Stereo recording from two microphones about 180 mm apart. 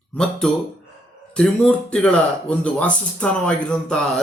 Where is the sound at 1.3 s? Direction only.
5° left (ahead or behind).